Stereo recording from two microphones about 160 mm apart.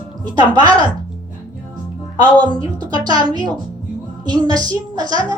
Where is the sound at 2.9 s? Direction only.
25° right (ahead or behind).